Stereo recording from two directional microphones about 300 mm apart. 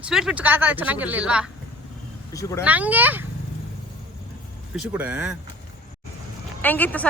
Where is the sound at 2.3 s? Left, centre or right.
Centre.